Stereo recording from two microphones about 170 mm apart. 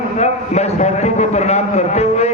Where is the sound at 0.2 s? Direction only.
40° left (ahead or behind).